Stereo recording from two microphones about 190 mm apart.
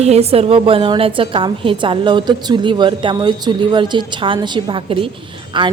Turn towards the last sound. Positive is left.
turn(degrees=-25)  # may be behind; listen again after turning